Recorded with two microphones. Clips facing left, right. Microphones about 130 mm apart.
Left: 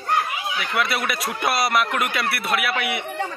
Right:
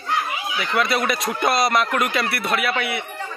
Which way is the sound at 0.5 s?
5° left (ahead or behind).